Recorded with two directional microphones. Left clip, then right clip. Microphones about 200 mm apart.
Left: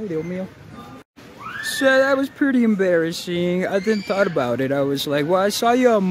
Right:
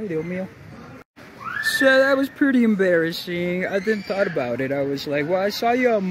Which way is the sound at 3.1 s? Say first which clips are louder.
Left 2 dB; 15° left (ahead or behind).